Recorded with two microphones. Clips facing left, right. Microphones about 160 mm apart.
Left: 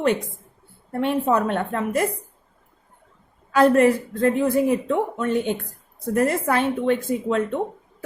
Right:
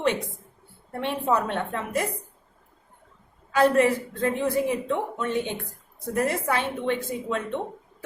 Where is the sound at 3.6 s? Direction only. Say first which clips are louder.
Left 4 dB; 50° left (ahead or behind).